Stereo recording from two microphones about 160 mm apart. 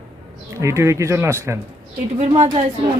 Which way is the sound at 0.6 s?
20° right (ahead or behind).